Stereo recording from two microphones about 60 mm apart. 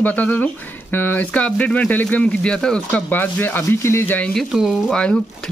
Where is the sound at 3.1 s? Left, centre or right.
Left.